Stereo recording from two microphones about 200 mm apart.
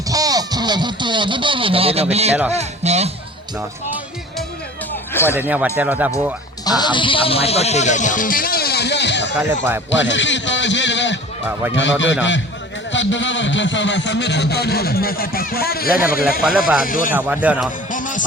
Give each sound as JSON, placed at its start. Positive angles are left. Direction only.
{"t": 0.1, "sound": "speech", "side_deg": -20}
{"t": 5.1, "sound": "speech", "side_deg": 10}
{"t": 5.4, "sound": "speech", "side_deg": -10}
{"t": 6.7, "sound": "speech", "side_deg": 20}
{"t": 9.4, "sound": "speech", "side_deg": -10}
{"t": 9.9, "sound": "a man's voice", "side_deg": 65}
{"t": 16.4, "sound": "speech", "side_deg": 0}
{"t": 16.8, "sound": "speech", "side_deg": 45}
{"t": 17.2, "sound": "speech", "side_deg": -10}
{"t": 17.9, "sound": "music", "side_deg": 40}